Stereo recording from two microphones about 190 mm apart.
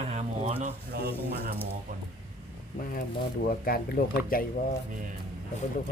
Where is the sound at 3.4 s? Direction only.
50° left (ahead or behind).